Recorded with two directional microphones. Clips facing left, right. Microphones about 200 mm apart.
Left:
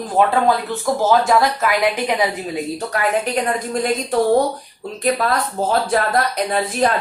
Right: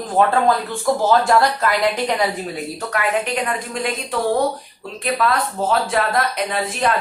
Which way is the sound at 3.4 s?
40° left (ahead or behind).